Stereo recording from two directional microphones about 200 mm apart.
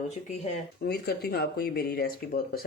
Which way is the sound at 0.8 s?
50° left (ahead or behind).